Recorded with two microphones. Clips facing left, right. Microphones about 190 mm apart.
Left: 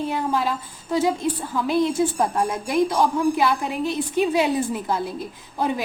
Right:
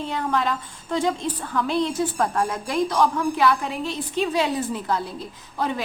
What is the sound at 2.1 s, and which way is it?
A woman's voice, 20° left (ahead or behind).